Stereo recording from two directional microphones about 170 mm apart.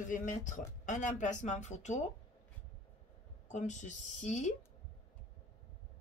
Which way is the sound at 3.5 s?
45° left (ahead or behind).